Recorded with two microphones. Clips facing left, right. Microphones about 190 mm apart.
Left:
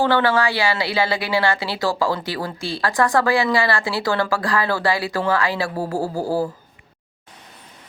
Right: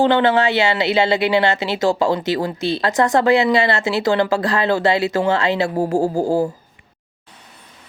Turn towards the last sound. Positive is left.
turn(degrees=-20)  # may be behind; listen again after turning